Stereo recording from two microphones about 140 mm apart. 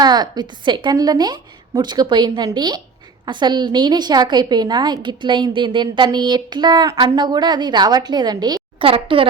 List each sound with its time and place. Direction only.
0.0 s speech: 30° right (ahead or behind)